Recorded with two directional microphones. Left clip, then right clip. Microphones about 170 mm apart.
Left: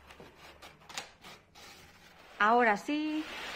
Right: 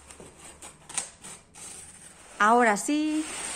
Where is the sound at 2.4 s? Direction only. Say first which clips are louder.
Right 5 dB; 15° right (ahead or behind).